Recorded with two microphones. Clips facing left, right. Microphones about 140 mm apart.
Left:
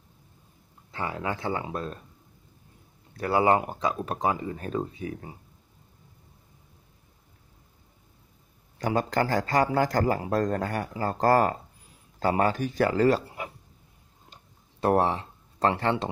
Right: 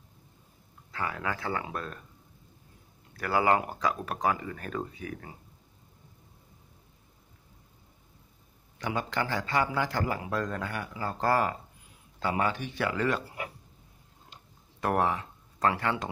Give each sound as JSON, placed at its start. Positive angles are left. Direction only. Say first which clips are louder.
{"t": 0.9, "sound": "speech", "louder": "left 2 dB", "side_deg": 25}
{"t": 3.2, "sound": "speech", "louder": "left 3 dB", "side_deg": 25}
{"t": 8.7, "sound": "speech", "louder": "left 6 dB", "side_deg": 40}
{"t": 14.8, "sound": "speech", "louder": "left 4 dB", "side_deg": 30}